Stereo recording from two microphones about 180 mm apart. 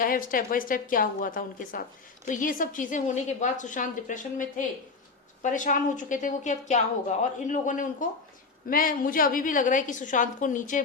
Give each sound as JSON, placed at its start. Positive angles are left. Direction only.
{"t": 0.0, "sound": "a woman's voice", "side_deg": 50}